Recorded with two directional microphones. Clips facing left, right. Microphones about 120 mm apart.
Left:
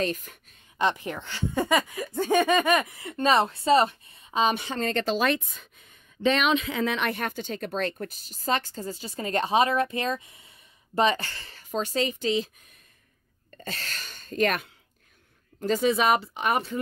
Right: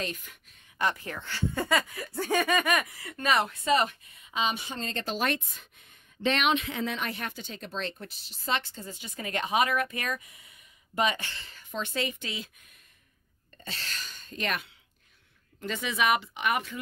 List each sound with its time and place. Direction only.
0.0 s speech: 45° left (ahead or behind)
0.7 s speech: 20° left (ahead or behind); by 4.6 s 40° left (ahead or behind)
4.6 s a woman's voice: 65° left (ahead or behind); by 5.2 s 85° left
6.8 s a woman's voice: 75° left (ahead or behind)
7.2 s speech: 50° left (ahead or behind); by 12.4 s 30° left (ahead or behind)
13.7 s speech: 45° left (ahead or behind)
15.6 s speech: 35° left (ahead or behind)